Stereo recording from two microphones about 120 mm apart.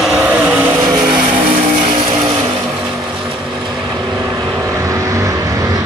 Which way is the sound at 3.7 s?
10° right (ahead or behind).